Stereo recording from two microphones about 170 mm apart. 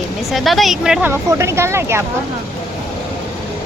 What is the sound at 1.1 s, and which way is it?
Speech, 15° right (ahead or behind).